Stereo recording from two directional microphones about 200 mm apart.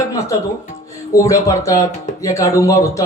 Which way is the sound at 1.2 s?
15° left (ahead or behind).